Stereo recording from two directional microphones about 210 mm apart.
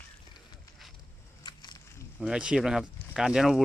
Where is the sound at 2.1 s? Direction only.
5° right (ahead or behind).